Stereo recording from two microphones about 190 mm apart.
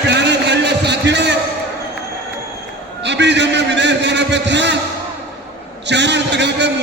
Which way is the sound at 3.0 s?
65° right (ahead or behind).